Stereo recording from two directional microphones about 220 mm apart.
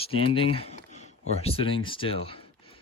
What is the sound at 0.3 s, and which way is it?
Speech, 25° left (ahead or behind).